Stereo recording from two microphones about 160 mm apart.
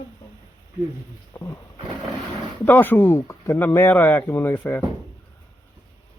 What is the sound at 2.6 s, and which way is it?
Speech, 10° left (ahead or behind).